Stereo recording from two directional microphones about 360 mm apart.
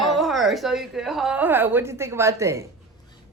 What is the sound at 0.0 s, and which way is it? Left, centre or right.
A woman's voice, centre.